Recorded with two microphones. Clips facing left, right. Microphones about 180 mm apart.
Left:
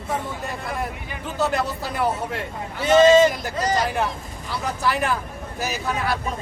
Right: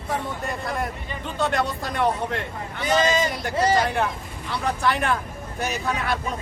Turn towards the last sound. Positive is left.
turn(degrees=5)  # may be behind; listen again after turning